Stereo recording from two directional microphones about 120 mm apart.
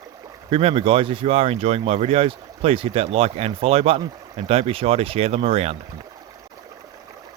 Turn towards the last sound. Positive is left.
turn(degrees=-55)  # may be behind; listen again after turning